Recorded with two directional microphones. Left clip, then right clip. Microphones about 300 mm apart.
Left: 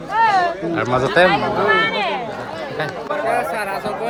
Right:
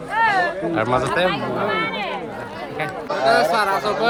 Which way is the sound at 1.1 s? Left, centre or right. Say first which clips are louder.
Left 6 dB; left.